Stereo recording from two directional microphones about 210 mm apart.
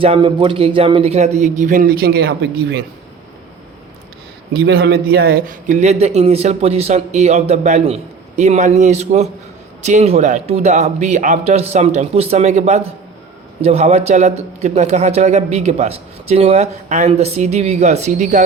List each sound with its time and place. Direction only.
0.0 s a man's voice: 25° right (ahead or behind); by 2.7 s 50° right (ahead or behind)
4.6 s a man's voice: 50° right (ahead or behind)